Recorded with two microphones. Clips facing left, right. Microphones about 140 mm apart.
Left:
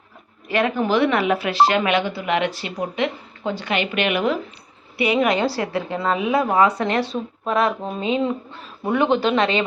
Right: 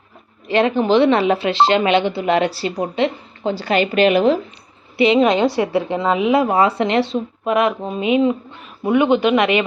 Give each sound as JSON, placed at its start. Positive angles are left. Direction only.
{"t": 0.4, "sound": "speech", "side_deg": -25}